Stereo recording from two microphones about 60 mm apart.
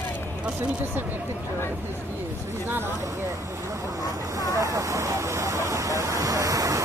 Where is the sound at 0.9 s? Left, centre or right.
Right.